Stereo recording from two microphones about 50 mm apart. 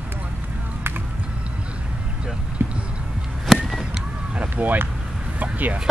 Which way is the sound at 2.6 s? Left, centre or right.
Right.